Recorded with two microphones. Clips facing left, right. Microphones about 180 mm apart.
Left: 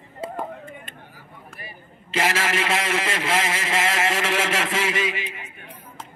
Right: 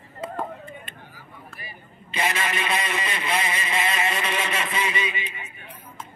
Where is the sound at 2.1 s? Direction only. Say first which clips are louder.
Left 3 dB; 90° left.